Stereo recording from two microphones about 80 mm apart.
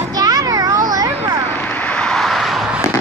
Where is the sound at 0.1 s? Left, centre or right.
Right.